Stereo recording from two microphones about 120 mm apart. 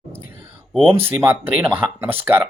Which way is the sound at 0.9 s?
15° right (ahead or behind).